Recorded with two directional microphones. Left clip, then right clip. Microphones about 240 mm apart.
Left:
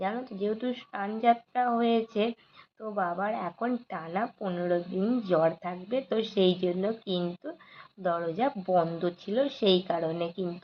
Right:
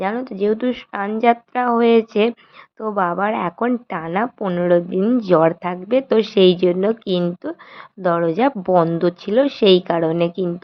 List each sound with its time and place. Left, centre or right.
0.0 s speech: right